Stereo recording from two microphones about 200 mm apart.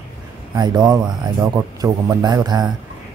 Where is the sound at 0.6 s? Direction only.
20° right (ahead or behind).